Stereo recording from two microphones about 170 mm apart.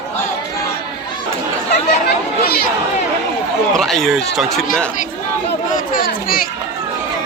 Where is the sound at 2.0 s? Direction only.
65° left (ahead or behind).